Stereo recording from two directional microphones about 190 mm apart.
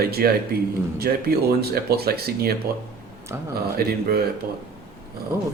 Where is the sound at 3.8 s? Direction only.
55° right (ahead or behind).